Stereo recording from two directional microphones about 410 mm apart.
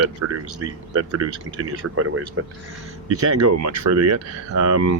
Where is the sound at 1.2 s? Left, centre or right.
Right.